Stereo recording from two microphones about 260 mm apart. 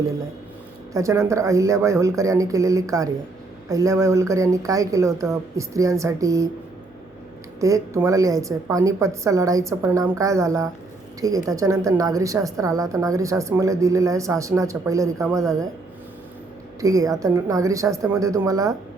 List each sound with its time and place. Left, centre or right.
0.9 s a woman's voice: centre
7.6 s a woman's voice: centre
16.8 s a woman's voice: centre